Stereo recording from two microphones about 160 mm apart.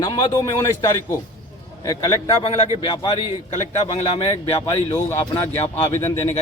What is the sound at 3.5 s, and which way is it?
A man's voice, 40° left (ahead or behind).